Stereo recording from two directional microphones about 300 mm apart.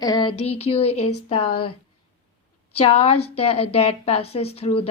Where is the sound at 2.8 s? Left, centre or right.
Centre.